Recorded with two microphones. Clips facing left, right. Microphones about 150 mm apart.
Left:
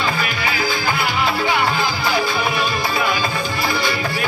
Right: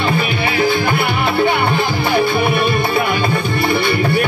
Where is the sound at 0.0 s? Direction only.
60° right (ahead or behind).